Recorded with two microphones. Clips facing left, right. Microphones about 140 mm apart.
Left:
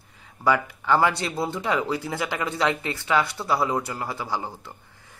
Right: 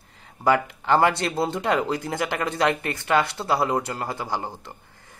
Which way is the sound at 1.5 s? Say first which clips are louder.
Right 2 dB; 60° right (ahead or behind).